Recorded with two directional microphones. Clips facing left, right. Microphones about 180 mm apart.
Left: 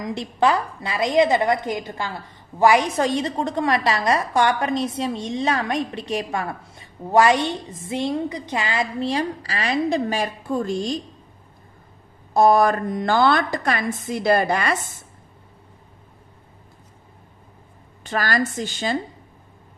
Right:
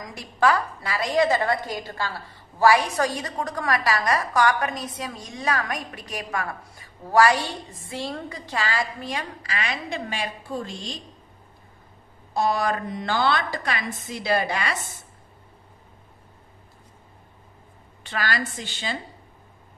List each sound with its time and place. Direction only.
0.0 s a woman's voice: 25° left (ahead or behind)
9.0 s a woman's voice: 35° left (ahead or behind); by 11.0 s 50° left (ahead or behind)
12.4 s a woman's voice: 50° left (ahead or behind)
18.0 s a woman's voice: 45° left (ahead or behind)